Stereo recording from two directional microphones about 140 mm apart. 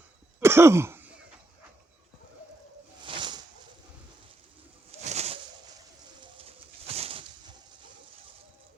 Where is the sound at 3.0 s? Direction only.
35° right (ahead or behind).